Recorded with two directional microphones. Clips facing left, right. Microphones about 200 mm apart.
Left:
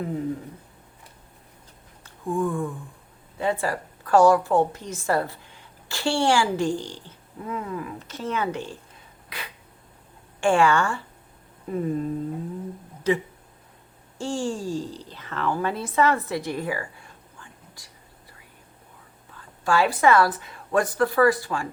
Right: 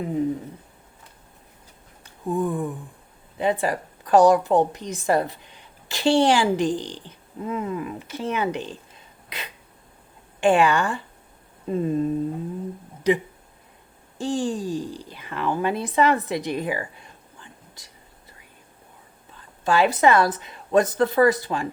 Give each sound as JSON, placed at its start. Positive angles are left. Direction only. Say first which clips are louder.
{"t": 2.0, "sound": "a sound", "louder": "right 1 dB", "side_deg": -20}
{"t": 3.3, "sound": "a woman's voice", "louder": "right 2 dB", "side_deg": -20}
{"t": 19.3, "sound": "a woman's voice", "louder": "right 1 dB", "side_deg": -20}